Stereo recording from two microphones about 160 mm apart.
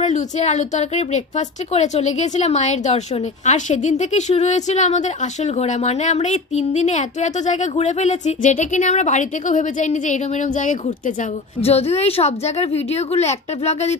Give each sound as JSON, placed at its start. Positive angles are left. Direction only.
{"t": 0.0, "sound": "a woman's voice", "side_deg": 45}
{"t": 11.6, "sound": "a woman's voice", "side_deg": 40}